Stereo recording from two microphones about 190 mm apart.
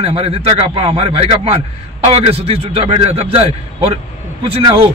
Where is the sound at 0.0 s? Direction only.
30° right (ahead or behind).